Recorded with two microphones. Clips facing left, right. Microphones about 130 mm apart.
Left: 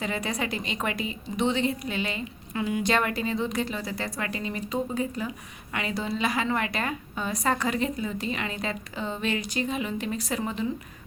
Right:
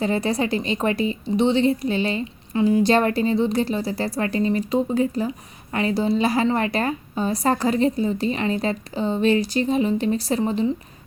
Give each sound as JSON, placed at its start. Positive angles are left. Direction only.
{"t": 0.0, "sound": "a woman's voice", "side_deg": -30}